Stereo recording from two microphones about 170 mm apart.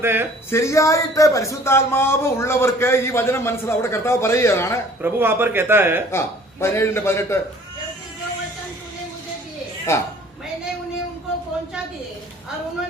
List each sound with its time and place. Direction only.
0.0 s a man's voice: 15° right (ahead or behind)
0.5 s a man's voice: 15° left (ahead or behind)
5.0 s a man's voice: 10° right (ahead or behind)
6.1 s a man's voice: 15° left (ahead or behind)
9.9 s a man's voice: 15° left (ahead or behind)